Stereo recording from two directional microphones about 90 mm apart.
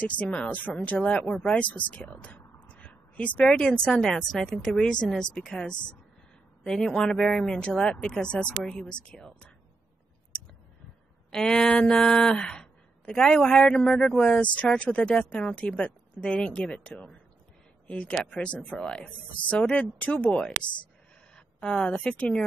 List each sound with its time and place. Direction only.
0.0 s speech: 15° left (ahead or behind)
2.7 s a sound: 15° left (ahead or behind)
3.4 s a woman's voice: 10° left (ahead or behind)
11.3 s speech: 5° left (ahead or behind)
21.5 s speech: 10° left (ahead or behind)